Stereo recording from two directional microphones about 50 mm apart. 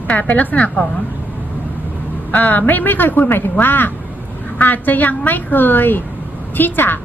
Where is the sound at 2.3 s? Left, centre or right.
Left.